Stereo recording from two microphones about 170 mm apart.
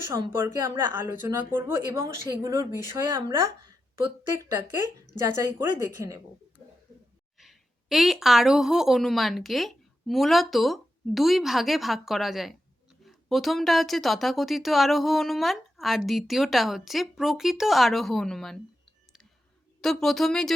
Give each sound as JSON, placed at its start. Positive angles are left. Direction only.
{"t": 0.1, "sound": "speech", "side_deg": -15}
{"t": 4.5, "sound": "speech", "side_deg": -15}
{"t": 7.3, "sound": "speech", "side_deg": 0}
{"t": 19.8, "sound": "speech", "side_deg": 0}